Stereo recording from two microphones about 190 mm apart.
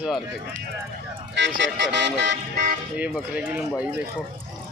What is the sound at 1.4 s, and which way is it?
Music, 65° right (ahead or behind).